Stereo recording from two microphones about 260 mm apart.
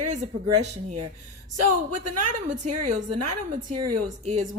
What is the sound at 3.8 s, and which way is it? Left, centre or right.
Speech, right.